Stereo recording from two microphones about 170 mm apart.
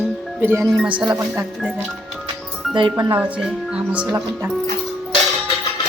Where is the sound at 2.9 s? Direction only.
10° right (ahead or behind).